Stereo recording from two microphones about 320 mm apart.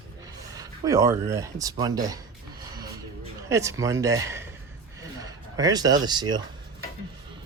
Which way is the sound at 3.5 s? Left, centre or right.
Centre.